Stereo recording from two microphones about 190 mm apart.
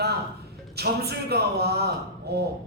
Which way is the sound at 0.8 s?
60° right (ahead or behind).